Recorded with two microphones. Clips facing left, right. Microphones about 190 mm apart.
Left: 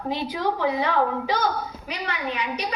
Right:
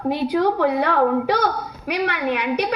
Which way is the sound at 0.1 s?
60° right (ahead or behind).